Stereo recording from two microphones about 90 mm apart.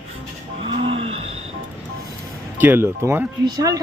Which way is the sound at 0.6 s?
90° right.